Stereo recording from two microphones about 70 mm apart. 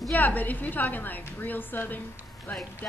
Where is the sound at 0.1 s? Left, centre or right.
Left.